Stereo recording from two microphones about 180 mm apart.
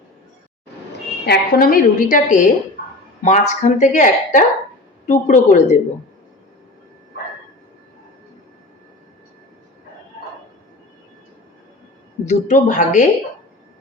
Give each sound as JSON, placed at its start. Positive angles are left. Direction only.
{"t": 1.2, "sound": "a woman's voice", "side_deg": 60}
{"t": 12.2, "sound": "a woman's voice", "side_deg": 40}